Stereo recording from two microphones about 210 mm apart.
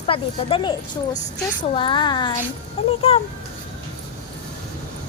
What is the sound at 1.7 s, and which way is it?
A woman's voice, 25° left (ahead or behind).